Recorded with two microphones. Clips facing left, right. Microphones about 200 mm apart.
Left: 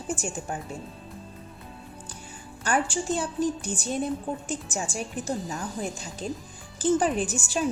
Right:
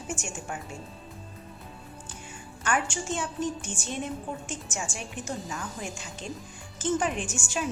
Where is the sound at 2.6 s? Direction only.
35° left (ahead or behind).